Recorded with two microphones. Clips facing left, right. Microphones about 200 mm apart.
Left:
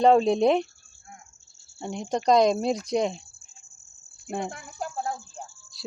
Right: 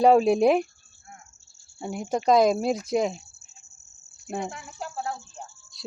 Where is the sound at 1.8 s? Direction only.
5° right (ahead or behind).